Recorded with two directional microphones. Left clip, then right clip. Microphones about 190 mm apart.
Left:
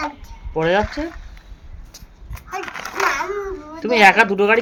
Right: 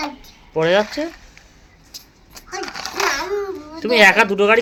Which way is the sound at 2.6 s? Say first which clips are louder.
Right 1 dB; 20° left (ahead or behind).